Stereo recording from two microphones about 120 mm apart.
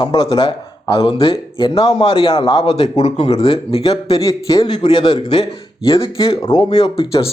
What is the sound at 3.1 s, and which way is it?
Speech, 50° left (ahead or behind).